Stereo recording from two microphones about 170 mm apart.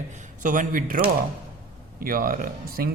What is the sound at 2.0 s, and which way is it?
Speech, 60° right (ahead or behind).